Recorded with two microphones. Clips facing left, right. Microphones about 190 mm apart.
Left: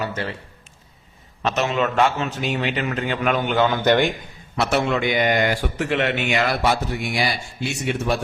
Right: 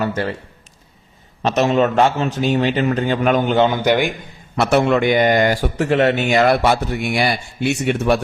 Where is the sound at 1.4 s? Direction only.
35° right (ahead or behind).